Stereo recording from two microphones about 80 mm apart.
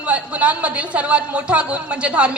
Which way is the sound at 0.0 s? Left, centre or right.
Centre.